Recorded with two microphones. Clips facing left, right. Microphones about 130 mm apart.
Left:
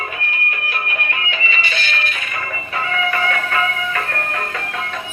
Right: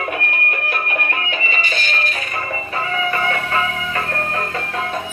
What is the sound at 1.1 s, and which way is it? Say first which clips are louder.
Music: right 1 dB; 45° right (ahead or behind).